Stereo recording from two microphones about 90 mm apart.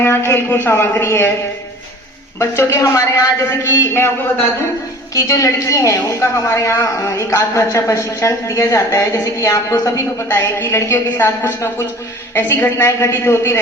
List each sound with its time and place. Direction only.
0.0 s a woman's voice: 25° left (ahead or behind)
2.4 s a woman's voice: 30° left (ahead or behind)
5.1 s a woman's voice: 40° left (ahead or behind)
10.2 s a woman's voice: 25° left (ahead or behind)